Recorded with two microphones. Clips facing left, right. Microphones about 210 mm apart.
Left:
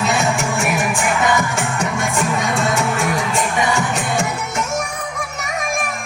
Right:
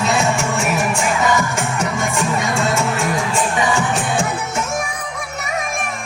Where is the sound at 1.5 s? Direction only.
Centre (ahead or behind).